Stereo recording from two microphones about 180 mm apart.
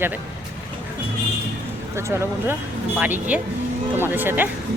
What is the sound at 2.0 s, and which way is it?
Speech, 15° right (ahead or behind).